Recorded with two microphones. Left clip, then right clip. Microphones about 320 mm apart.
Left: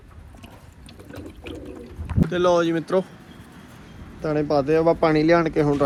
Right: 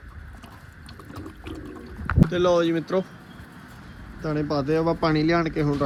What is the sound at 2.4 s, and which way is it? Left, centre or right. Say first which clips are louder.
Speech: left 2 dB; centre.